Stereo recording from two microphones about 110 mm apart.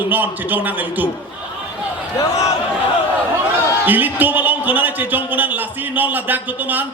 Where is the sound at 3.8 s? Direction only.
15° right (ahead or behind).